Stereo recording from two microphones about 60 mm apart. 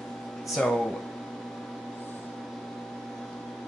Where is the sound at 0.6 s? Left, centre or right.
Centre.